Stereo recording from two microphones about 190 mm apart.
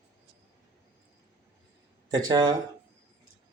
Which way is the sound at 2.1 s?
20° right (ahead or behind).